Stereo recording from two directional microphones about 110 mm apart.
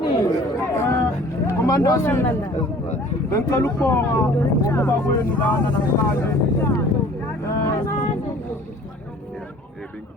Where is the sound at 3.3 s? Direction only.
30° left (ahead or behind).